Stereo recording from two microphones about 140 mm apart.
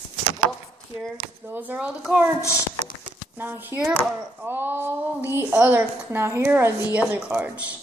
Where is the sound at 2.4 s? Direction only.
20° left (ahead or behind).